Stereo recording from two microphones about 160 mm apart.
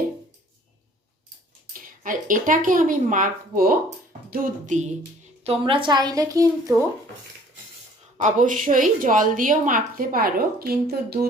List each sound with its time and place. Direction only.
1.7 s a woman's voice: 60° right (ahead or behind)
5.4 s a woman's voice: 35° right (ahead or behind)
8.2 s a woman's voice: 55° right (ahead or behind); by 11.3 s 75° right (ahead or behind)